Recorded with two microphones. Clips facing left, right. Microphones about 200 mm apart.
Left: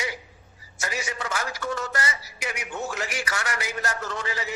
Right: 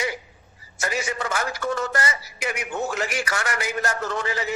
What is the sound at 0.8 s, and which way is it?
A man's voice, 55° right (ahead or behind).